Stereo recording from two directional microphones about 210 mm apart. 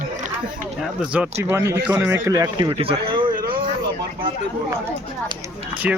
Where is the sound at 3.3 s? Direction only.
45° right (ahead or behind).